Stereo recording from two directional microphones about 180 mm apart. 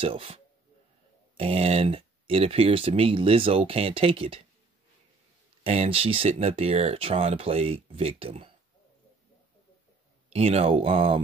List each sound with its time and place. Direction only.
0.0 s speech: 30° right (ahead or behind)
5.6 s speech: 30° right (ahead or behind)
10.3 s speech: 35° right (ahead or behind)